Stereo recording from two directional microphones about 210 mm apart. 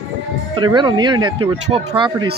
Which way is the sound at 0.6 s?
20° right (ahead or behind).